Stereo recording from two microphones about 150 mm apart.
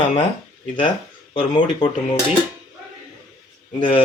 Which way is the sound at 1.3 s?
35° left (ahead or behind).